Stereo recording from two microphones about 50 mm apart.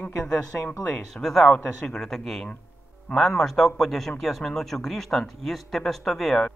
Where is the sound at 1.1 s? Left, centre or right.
Centre.